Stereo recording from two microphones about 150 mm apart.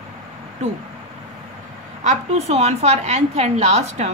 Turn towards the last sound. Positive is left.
turn(degrees=-50)  # may be behind; listen again after turning